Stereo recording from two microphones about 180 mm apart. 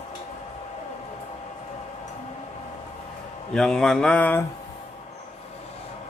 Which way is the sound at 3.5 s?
5° left (ahead or behind).